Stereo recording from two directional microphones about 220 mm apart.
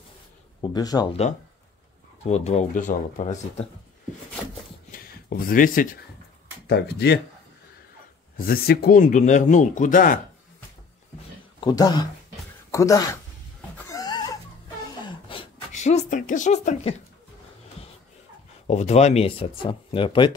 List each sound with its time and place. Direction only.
0.6 s speech: 15° left (ahead or behind)
2.2 s speech: 30° left (ahead or behind)
4.9 s speech: 40° left (ahead or behind)
8.4 s speech: 40° left (ahead or behind)
11.6 s speech: 20° left (ahead or behind)
13.8 s a sound: 15° left (ahead or behind)
18.7 s speech: 30° left (ahead or behind)